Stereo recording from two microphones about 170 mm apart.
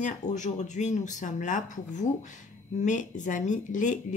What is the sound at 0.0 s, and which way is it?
Speech, 45° left (ahead or behind).